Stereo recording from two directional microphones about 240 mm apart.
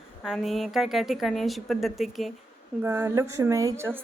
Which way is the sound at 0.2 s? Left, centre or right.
Centre.